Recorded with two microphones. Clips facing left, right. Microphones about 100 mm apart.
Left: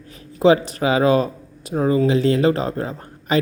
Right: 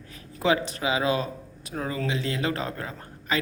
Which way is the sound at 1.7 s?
30° left (ahead or behind).